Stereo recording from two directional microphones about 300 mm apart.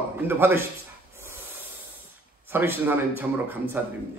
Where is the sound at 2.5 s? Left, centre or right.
Centre.